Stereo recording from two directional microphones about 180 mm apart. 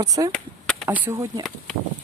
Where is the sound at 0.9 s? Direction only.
10° right (ahead or behind).